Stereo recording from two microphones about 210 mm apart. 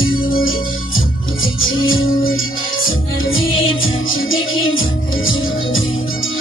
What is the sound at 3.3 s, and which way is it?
Music, 70° left (ahead or behind).